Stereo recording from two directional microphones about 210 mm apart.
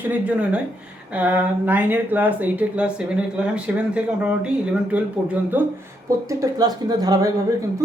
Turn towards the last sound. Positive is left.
turn(degrees=-15)  # may be behind; listen again after turning